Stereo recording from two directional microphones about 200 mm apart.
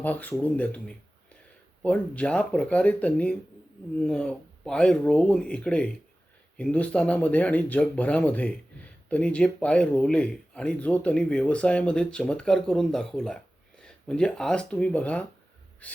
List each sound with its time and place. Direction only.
0.0 s speech: 10° left (ahead or behind)